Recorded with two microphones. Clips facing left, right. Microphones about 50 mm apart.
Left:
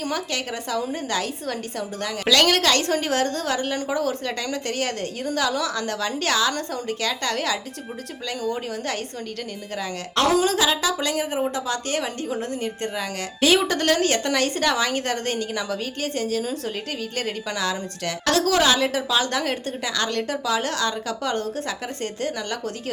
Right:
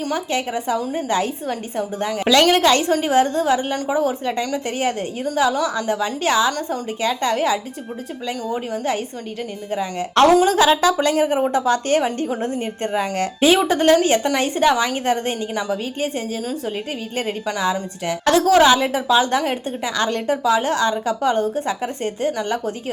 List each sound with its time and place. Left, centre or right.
0.1 s a woman's voice: centre
10.4 s speech: right
13.5 s a woman's voice: centre